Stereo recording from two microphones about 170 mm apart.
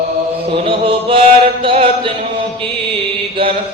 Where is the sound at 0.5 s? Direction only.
30° right (ahead or behind).